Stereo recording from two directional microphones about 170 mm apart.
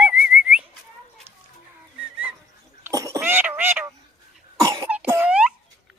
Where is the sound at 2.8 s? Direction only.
20° right (ahead or behind).